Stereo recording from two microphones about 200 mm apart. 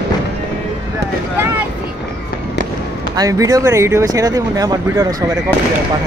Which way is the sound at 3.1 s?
15° right (ahead or behind).